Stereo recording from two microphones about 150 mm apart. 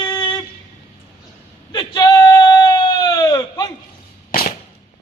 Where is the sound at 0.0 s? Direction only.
30° left (ahead or behind).